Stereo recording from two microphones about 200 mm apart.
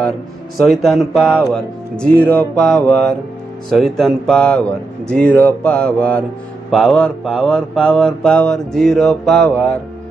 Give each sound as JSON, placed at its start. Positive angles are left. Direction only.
{"t": 0.6, "sound": "mantra", "side_deg": 0}